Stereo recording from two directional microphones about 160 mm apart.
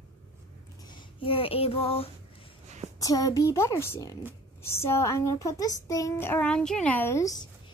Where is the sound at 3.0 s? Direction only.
20° left (ahead or behind).